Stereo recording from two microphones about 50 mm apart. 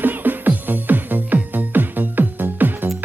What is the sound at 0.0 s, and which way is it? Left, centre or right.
Music, right.